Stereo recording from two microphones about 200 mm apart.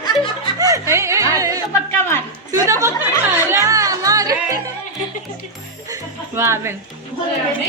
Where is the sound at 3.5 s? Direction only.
15° right (ahead or behind).